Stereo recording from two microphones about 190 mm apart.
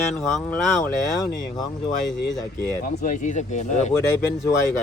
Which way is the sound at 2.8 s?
45° left (ahead or behind).